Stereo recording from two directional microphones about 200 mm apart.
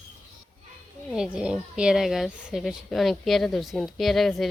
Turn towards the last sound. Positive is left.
turn(degrees=0)  # may be behind; listen again after turning